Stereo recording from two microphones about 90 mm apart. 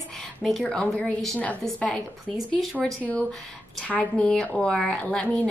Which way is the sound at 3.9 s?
15° left (ahead or behind).